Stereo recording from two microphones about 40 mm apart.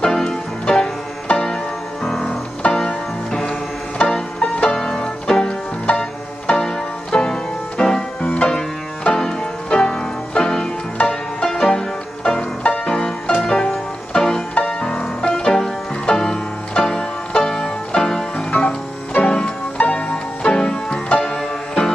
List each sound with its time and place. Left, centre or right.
0.0 s music: centre
2.6 s music: left
4.4 s music: left
12.6 s music: left
12.9 s music: centre
19.8 s music: left; by 21.9 s centre